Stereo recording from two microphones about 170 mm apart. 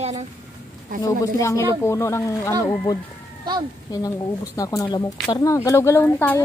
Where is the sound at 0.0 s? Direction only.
40° right (ahead or behind).